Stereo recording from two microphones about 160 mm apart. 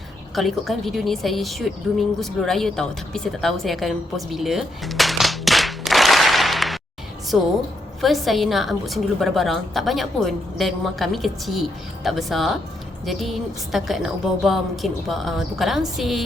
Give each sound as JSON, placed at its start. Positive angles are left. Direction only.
{"t": 0.3, "sound": "a woman's voice", "side_deg": 0}